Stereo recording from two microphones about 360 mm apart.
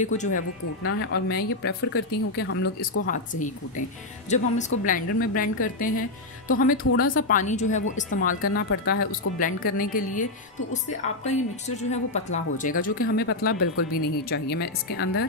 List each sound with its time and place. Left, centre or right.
0.0 s a woman's voice: centre
3.1 s a woman's voice: left
6.8 s a woman's voice: left
11.2 s a woman's voice: centre